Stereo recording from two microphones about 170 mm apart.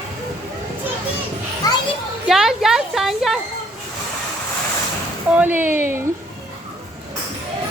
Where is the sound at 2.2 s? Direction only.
Centre (ahead or behind).